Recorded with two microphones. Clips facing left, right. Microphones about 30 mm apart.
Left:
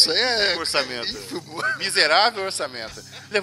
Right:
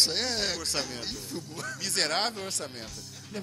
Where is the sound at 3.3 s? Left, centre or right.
Left.